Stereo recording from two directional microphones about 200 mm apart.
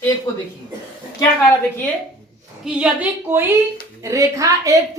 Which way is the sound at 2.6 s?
5° right (ahead or behind).